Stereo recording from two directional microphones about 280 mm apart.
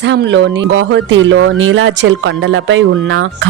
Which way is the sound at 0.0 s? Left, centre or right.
Right.